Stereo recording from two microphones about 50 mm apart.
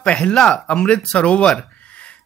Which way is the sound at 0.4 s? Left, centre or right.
Centre.